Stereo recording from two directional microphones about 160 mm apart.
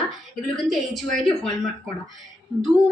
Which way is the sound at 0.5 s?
Centre (ahead or behind).